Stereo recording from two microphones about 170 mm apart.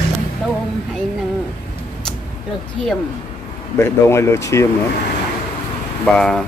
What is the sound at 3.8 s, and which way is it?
Speech, 15° left (ahead or behind).